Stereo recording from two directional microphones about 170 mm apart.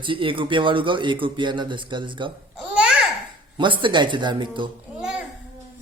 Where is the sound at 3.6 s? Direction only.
30° right (ahead or behind).